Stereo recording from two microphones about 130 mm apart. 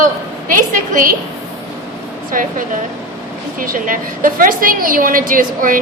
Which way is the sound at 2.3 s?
90° right.